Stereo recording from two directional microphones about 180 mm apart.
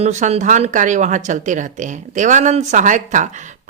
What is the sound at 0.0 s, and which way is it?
Speech, 40° right (ahead or behind).